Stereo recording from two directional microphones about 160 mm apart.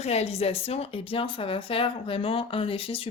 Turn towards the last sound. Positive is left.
turn(degrees=35)  # may be behind; listen again after turning